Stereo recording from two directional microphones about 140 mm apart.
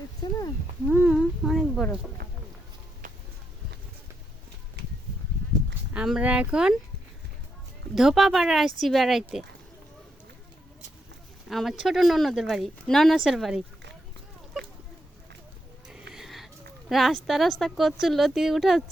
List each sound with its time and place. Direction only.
0.2 s speech: 30° left (ahead or behind)
0.9 s speech: 10° right (ahead or behind)
2.2 s a sound: 90° right
3.0 s a sound: 65° right (ahead or behind)
5.9 s speech: 5° right (ahead or behind)
7.9 s speech: centre (ahead or behind)
11.4 s speech: centre (ahead or behind)
15.9 s a sound: 5° right (ahead or behind)
16.9 s speech: centre (ahead or behind)